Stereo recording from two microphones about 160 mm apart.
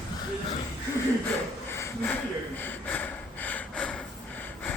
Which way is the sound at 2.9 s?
10° left (ahead or behind).